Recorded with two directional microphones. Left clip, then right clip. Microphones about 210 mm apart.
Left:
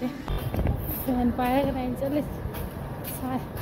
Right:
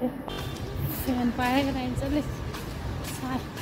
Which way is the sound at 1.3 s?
5° left (ahead or behind).